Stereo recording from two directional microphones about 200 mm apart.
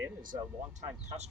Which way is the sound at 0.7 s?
35° right (ahead or behind).